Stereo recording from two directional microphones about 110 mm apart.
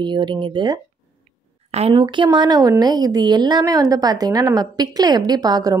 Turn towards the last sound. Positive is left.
turn(degrees=-35)  # may be behind; listen again after turning